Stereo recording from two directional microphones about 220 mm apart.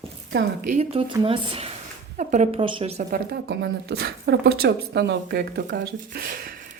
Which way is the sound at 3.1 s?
45° right (ahead or behind).